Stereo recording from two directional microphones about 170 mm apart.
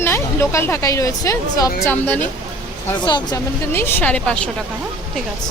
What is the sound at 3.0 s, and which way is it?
Speech, 25° left (ahead or behind).